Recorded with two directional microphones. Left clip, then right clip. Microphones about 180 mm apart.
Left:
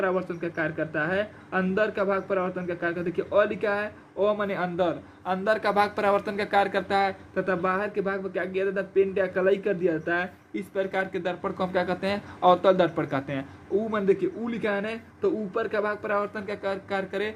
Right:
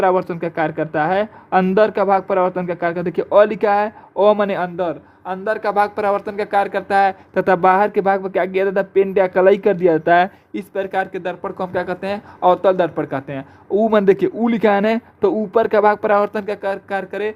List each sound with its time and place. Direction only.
0.0 s a woman's voice: 55° right (ahead or behind)
4.6 s speech: 25° right (ahead or behind)
7.3 s a man's voice: 60° right (ahead or behind)
10.8 s speech: 30° right (ahead or behind)
13.7 s a man's voice: 55° right (ahead or behind); by 17.3 s 30° right (ahead or behind)